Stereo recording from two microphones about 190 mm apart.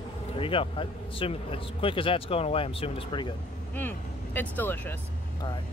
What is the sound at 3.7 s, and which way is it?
Speech, 10° left (ahead or behind).